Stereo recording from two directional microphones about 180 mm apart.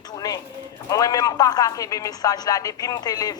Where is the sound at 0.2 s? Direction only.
20° left (ahead or behind).